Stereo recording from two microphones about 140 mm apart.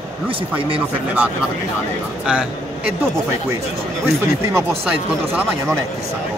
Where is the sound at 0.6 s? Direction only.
40° right (ahead or behind).